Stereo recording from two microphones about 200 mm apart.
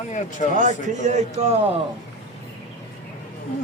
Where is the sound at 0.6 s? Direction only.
40° right (ahead or behind).